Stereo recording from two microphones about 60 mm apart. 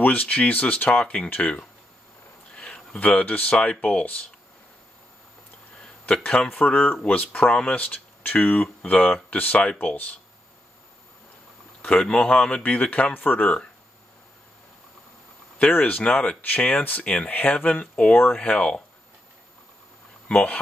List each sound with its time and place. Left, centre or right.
0.0 s speech: left
5.8 s a man's voice: centre
6.7 s speech: left
11.8 s speech: centre
15.6 s speech: left